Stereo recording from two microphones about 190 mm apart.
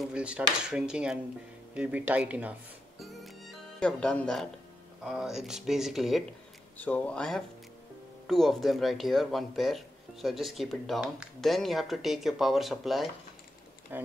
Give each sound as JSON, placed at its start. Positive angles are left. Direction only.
{"t": 0.0, "sound": "speech", "side_deg": -5}
{"t": 3.0, "sound": "music", "side_deg": 0}
{"t": 3.8, "sound": "speech", "side_deg": 5}